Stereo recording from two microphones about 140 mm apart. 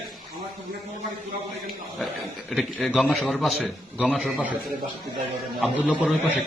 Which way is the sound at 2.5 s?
Centre (ahead or behind).